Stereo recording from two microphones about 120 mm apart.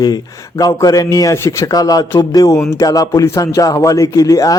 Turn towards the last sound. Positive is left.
turn(degrees=30)  # may be behind; listen again after turning